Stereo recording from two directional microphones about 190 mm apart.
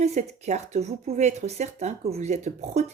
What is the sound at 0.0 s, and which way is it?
Speech, 35° right (ahead or behind).